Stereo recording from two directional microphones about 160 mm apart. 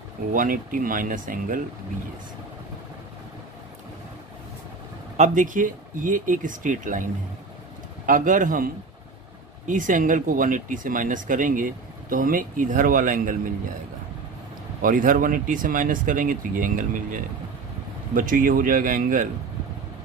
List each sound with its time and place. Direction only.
0.3 s speech: 60° right (ahead or behind)
5.1 s speech: 50° right (ahead or behind)
8.1 s speech: 55° right (ahead or behind)
14.8 s speech: 60° right (ahead or behind)